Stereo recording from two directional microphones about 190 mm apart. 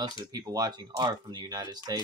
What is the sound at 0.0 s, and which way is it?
Speech, 20° right (ahead or behind).